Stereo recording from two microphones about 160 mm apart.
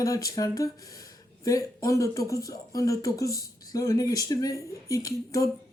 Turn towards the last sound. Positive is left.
turn(degrees=20)  # may be behind; listen again after turning